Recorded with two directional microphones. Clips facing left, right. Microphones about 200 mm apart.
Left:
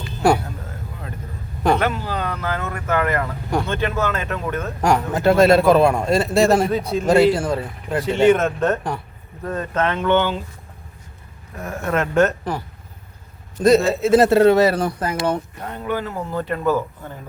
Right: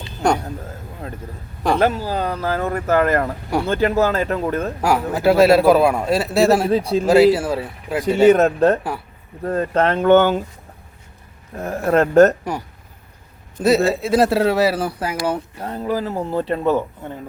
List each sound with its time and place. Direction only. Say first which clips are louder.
0.2 s speech: left 2 dB; 5° left (ahead or behind)
1.8 s speech: right 4 dB; 35° right (ahead or behind)
4.8 s a man's voice: left 2 dB; 5° right (ahead or behind)
6.7 s speech: right 4 dB; 30° right (ahead or behind)
7.1 s a man's voice: right 2 dB; 5° right (ahead or behind)
8.3 s speech: right 5 dB; 35° right (ahead or behind)
11.5 s speech: right 5 dB; 35° right (ahead or behind)
13.6 s a man's voice: left 1 dB; 5° right (ahead or behind)
15.6 s speech: right 5 dB; 35° right (ahead or behind)